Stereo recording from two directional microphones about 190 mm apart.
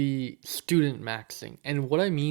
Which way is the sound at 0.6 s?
15° right (ahead or behind).